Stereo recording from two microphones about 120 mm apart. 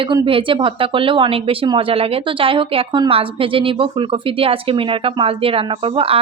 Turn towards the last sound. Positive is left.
turn(degrees=-50)  # may be behind; listen again after turning